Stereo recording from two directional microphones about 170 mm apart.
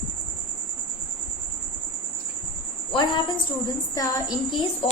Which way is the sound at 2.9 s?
30° left (ahead or behind).